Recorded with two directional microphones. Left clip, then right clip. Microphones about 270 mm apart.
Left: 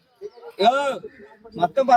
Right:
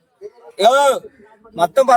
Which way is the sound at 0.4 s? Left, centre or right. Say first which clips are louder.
Right 7 dB; centre.